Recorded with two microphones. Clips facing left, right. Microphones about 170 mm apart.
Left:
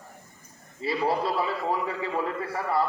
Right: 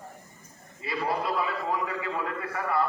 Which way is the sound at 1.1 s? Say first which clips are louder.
Even; 30° left (ahead or behind).